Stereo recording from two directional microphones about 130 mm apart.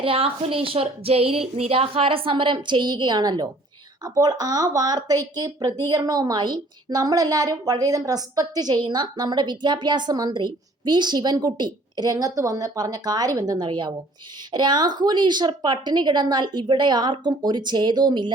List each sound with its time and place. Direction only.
0.0 s a woman's voice: 45° right (ahead or behind)